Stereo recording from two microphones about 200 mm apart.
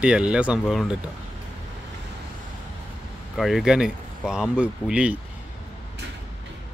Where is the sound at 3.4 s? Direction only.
Centre (ahead or behind).